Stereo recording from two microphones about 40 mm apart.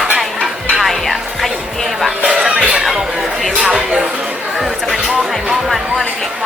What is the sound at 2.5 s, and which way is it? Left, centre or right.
Speech, right.